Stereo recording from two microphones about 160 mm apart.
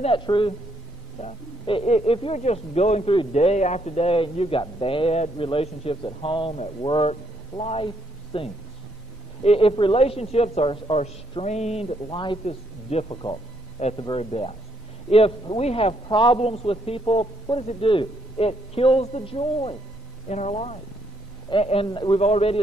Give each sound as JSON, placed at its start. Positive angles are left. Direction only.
{"t": 0.0, "sound": "speech", "side_deg": 30}
{"t": 20.2, "sound": "speech", "side_deg": 45}